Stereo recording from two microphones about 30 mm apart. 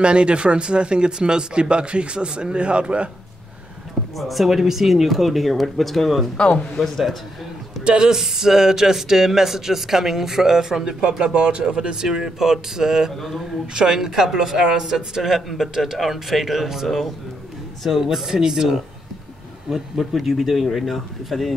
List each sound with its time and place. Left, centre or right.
0.0 s speech: right
4.2 s speech: centre
6.3 s a man's voice: left
6.8 s a man's voice: centre
8.0 s speech: centre
11.1 s speech: right
20.0 s speech: centre